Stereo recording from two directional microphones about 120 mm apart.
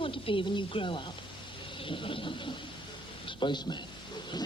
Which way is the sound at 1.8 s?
45° left (ahead or behind).